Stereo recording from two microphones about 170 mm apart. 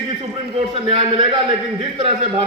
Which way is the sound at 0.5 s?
30° right (ahead or behind).